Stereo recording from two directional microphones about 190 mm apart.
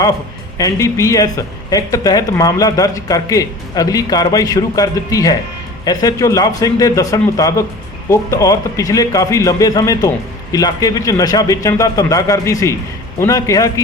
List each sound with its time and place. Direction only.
0.6 s a man's voice: 15° left (ahead or behind)